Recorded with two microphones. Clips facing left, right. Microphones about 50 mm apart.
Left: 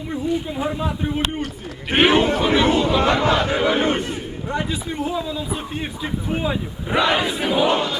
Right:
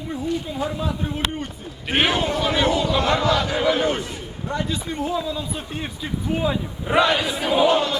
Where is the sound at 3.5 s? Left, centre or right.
Left.